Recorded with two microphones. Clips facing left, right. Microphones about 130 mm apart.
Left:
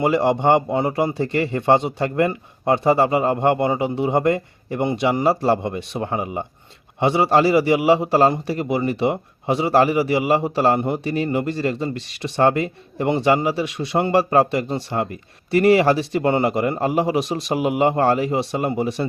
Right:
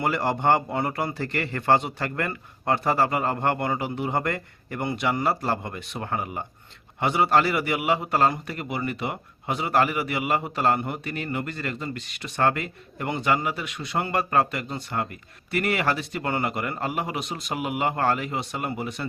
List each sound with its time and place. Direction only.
0.0 s a man's voice: 20° left (ahead or behind)